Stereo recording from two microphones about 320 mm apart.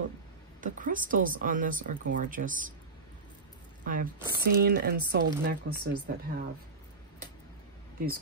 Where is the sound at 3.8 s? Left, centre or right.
Right.